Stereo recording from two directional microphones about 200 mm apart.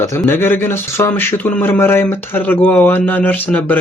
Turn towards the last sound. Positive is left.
turn(degrees=10)  # may be behind; listen again after turning